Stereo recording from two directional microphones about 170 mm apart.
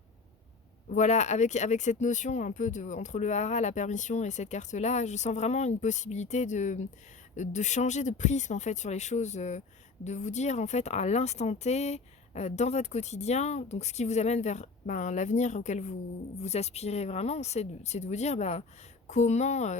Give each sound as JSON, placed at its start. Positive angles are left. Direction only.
{"t": 0.9, "sound": "speech", "side_deg": 45}